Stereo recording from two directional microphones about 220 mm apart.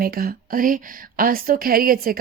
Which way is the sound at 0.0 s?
40° right (ahead or behind).